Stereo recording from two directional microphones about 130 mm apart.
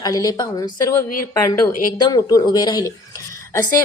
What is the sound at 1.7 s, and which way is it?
Speech, 90° left.